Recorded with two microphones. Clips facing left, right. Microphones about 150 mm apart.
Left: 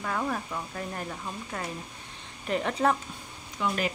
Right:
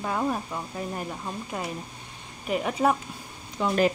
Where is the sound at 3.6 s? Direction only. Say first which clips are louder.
Right 3 dB; 35° right (ahead or behind).